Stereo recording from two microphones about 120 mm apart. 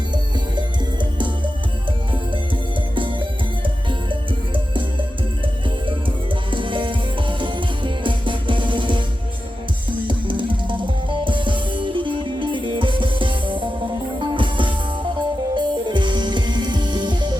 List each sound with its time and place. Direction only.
2.9 s music: 45° right (ahead or behind)
6.5 s music: 45° right (ahead or behind)
10.1 s music: 45° right (ahead or behind)